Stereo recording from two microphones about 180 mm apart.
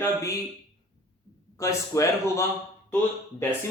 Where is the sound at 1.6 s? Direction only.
15° left (ahead or behind).